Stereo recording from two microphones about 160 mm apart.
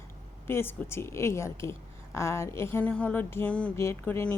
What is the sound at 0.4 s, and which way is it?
Speech, 15° left (ahead or behind).